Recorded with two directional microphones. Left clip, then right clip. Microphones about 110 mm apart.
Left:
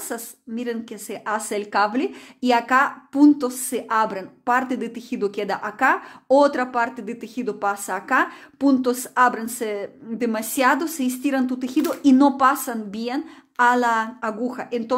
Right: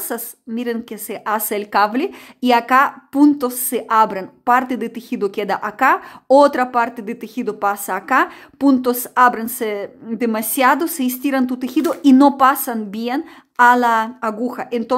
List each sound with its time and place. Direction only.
0.1 s a woman's voice: 40° right (ahead or behind)